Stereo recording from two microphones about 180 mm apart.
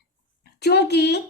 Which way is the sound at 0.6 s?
65° left (ahead or behind).